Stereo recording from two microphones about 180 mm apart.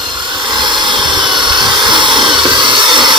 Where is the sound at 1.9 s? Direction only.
25° right (ahead or behind).